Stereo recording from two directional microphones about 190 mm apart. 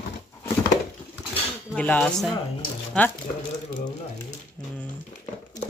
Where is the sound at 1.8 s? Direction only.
5° left (ahead or behind).